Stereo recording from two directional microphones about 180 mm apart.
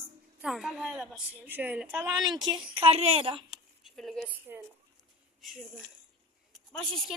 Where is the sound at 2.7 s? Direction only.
35° right (ahead or behind).